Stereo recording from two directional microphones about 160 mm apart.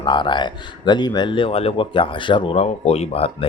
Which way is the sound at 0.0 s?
30° left (ahead or behind).